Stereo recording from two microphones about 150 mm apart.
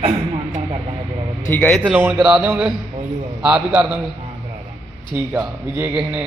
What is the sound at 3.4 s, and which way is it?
Speech, 5° right (ahead or behind).